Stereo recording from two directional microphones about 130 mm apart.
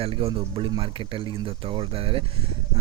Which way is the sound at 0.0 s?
45° right (ahead or behind).